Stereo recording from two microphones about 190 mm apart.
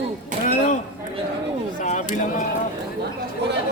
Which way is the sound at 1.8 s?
40° left (ahead or behind).